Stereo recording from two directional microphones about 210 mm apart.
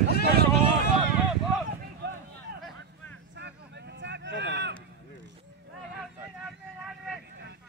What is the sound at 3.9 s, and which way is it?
Vehicle, 55° right (ahead or behind).